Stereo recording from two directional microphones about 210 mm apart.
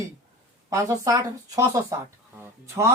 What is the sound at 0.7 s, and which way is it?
Speech, 15° right (ahead or behind).